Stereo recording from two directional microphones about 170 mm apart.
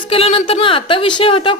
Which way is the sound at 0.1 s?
35° left (ahead or behind).